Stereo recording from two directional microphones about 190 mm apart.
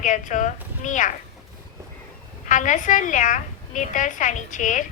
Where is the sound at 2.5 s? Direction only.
40° left (ahead or behind).